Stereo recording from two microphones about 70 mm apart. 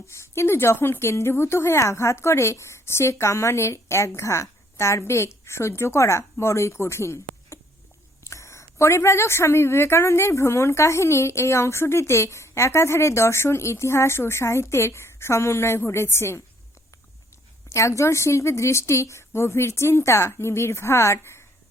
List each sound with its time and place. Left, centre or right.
0.1 s a woman's voice: left
17.7 s a woman's voice: left